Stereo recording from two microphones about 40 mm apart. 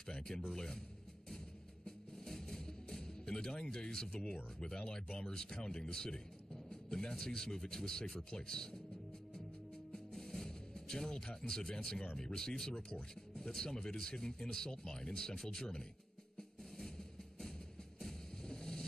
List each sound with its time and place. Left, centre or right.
0.0 s speech: centre
1.9 s music: centre
4.6 s speech: centre
9.9 s music: centre
12.2 s speech: centre
16.3 s music: centre